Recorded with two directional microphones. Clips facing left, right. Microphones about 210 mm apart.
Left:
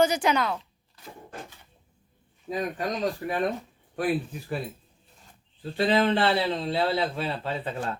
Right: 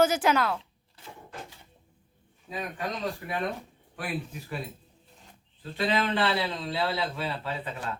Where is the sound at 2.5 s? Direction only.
40° left (ahead or behind).